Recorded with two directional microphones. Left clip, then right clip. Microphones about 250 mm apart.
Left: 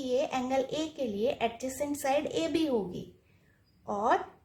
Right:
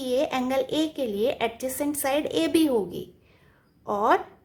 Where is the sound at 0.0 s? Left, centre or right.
Right.